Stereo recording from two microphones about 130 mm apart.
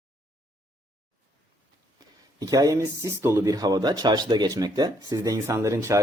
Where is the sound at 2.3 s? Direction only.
25° right (ahead or behind).